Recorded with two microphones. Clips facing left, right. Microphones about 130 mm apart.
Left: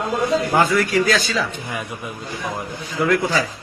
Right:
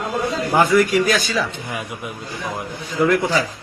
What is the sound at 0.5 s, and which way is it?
A man's voice, 15° right (ahead or behind).